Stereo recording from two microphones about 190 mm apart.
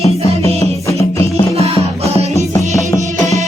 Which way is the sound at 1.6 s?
30° right (ahead or behind).